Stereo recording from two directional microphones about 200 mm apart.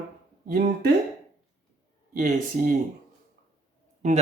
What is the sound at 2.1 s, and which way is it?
Speech, 40° right (ahead or behind).